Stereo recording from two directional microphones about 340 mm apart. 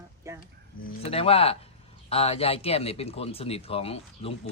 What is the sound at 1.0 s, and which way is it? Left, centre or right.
Speech, centre.